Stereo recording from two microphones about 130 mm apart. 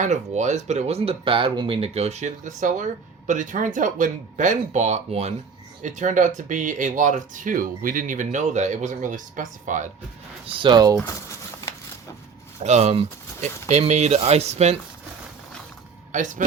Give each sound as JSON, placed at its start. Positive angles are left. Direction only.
{"t": 0.0, "sound": "speech", "side_deg": -65}
{"t": 5.8, "sound": "speech", "side_deg": -75}
{"t": 10.4, "sound": "speech", "side_deg": -40}
{"t": 11.0, "sound": "a sound", "side_deg": 20}
{"t": 12.6, "sound": "speech", "side_deg": -60}
{"t": 16.1, "sound": "speech", "side_deg": -75}